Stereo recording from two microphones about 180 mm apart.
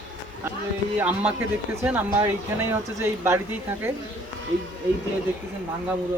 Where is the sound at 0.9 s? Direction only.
10° right (ahead or behind).